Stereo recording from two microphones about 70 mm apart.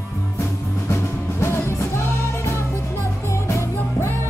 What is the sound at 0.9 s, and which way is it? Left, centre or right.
Music, left.